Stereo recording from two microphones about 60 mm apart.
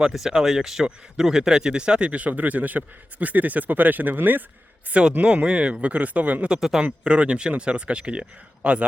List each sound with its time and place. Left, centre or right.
0.0 s speech: centre; by 4.4 s right
4.9 s speech: right
6.5 s speech: centre